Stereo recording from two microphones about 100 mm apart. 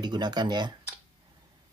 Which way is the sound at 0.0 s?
45° right (ahead or behind).